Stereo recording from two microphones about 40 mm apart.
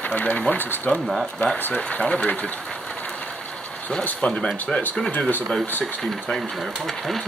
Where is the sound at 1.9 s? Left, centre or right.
Left.